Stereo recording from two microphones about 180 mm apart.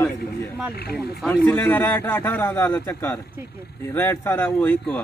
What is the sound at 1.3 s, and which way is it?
Speech, 10° left (ahead or behind).